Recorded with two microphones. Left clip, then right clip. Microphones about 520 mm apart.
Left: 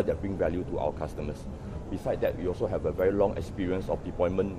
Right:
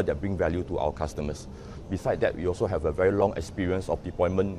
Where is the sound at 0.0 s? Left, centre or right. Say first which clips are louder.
Right 1 dB; right.